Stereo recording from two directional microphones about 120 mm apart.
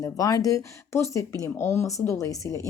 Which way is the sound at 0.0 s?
25° left (ahead or behind).